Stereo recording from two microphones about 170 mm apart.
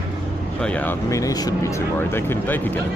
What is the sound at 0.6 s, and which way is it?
Speech, 10° left (ahead or behind).